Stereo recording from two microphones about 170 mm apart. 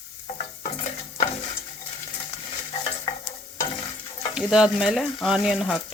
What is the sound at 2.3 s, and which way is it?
Stir, 30° left (ahead or behind).